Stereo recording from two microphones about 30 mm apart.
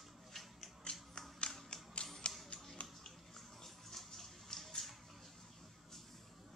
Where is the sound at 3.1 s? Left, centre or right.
Centre.